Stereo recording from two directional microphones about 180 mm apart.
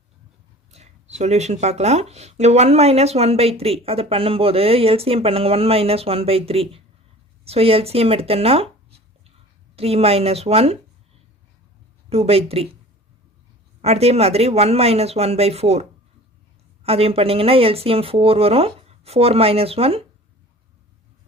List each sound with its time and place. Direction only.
0.7 s speech: 40° right (ahead or behind)
9.7 s speech: 35° right (ahead or behind)
12.0 s speech: 35° right (ahead or behind)
13.8 s speech: 35° right (ahead or behind)